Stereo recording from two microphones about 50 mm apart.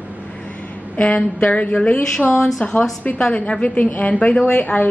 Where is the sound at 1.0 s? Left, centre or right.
Left.